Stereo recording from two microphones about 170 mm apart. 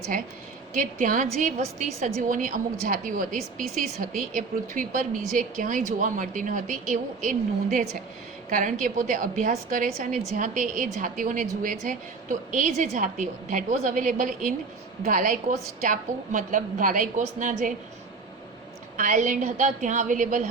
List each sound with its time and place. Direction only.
0.7 s a woman's voice: 50° right (ahead or behind)
4.4 s a woman's voice: 55° right (ahead or behind)
18.9 s a woman's voice: 50° right (ahead or behind)